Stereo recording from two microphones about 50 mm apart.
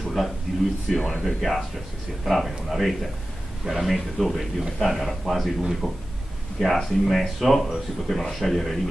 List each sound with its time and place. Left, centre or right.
0.2 s speech: centre
0.8 s speech: centre